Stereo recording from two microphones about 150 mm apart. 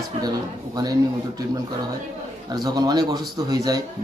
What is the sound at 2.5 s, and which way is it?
A man's voice, 25° right (ahead or behind).